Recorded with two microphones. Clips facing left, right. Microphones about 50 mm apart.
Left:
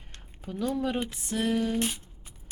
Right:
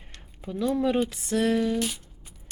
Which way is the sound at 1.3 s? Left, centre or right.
Right.